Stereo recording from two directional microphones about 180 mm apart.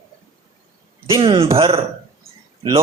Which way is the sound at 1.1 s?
30° right (ahead or behind).